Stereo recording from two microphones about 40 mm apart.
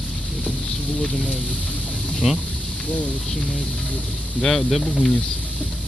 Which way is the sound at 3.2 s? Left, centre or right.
Centre.